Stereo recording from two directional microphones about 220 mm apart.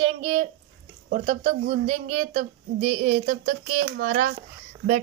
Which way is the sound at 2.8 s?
30° right (ahead or behind).